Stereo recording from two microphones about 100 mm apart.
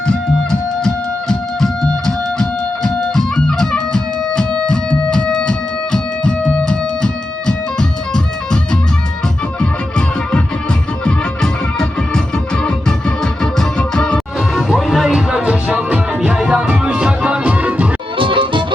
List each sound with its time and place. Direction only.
0.9 s music: 5° left (ahead or behind)
11.0 s music: 5° left (ahead or behind); by 17.8 s 15° right (ahead or behind)
18.2 s music: 60° right (ahead or behind)